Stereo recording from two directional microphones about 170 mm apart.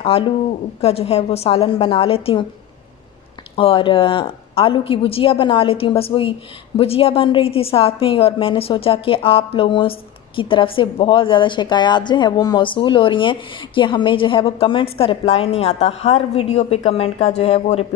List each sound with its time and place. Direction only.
0.0 s a woman's voice: 30° left (ahead or behind)
3.5 s a woman's voice: 30° left (ahead or behind)